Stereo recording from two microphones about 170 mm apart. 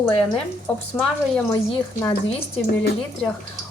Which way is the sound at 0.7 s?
10° left (ahead or behind).